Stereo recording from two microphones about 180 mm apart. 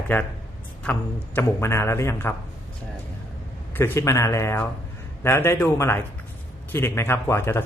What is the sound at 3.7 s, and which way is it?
A man's voice, 10° left (ahead or behind).